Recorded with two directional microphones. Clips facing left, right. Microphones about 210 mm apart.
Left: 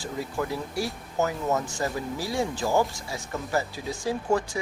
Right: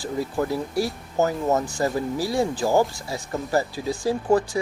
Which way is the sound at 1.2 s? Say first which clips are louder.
Right 4 dB; 35° right (ahead or behind).